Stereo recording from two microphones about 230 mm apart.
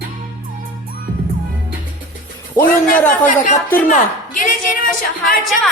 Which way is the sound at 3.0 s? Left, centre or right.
Left.